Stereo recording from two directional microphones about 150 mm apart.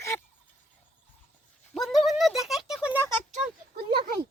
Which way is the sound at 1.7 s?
Centre (ahead or behind).